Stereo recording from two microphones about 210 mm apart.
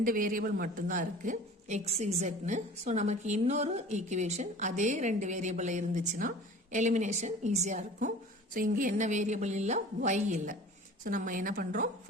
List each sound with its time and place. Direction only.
0.0 s a woman's voice: 40° right (ahead or behind)